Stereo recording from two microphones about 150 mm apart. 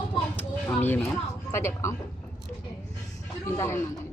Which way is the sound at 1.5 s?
15° left (ahead or behind).